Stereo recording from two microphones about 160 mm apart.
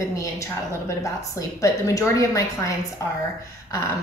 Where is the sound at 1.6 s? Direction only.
20° left (ahead or behind).